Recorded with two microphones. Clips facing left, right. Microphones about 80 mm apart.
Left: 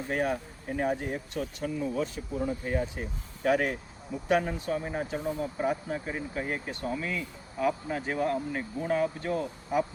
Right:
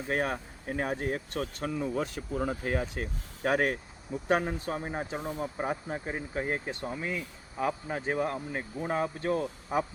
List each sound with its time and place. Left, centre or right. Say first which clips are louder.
0.1 s speech: left 1 dB; right
2.4 s speech: left 1 dB; right
3.4 s a man's voice: left 1 dB; right